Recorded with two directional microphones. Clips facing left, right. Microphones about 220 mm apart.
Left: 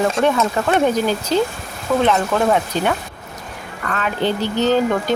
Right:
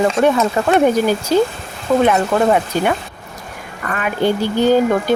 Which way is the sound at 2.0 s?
10° right (ahead or behind).